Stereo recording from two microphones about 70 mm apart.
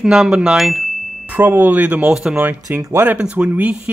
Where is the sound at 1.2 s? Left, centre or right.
Right.